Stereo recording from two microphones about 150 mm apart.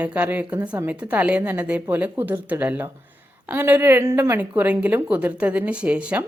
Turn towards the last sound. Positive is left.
turn(degrees=-10)  # may be behind; listen again after turning